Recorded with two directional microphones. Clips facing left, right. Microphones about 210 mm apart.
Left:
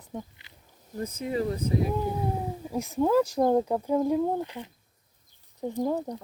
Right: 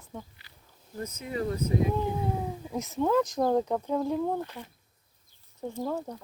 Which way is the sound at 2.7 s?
15° left (ahead or behind).